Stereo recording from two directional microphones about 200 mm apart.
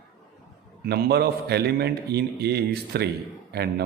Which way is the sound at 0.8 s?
55° right (ahead or behind).